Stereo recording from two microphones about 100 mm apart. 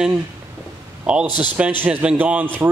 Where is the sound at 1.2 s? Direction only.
45° left (ahead or behind).